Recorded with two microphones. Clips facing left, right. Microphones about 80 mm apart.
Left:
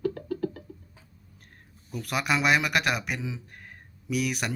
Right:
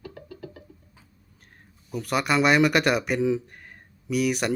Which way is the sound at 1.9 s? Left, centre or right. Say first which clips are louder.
Right 4 dB; centre.